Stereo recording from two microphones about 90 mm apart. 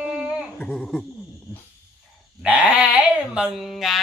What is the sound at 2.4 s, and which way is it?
A man's voice, 15° right (ahead or behind).